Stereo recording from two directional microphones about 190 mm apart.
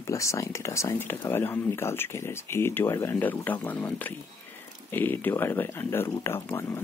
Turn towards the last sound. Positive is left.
turn(degrees=15)  # may be behind; listen again after turning